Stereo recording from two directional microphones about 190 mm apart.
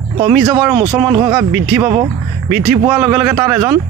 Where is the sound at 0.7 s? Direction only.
20° right (ahead or behind).